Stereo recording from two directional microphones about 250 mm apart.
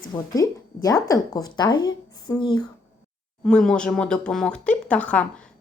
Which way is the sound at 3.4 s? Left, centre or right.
Centre.